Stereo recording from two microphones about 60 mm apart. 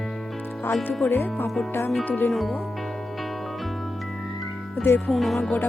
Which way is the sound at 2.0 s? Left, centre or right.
Left.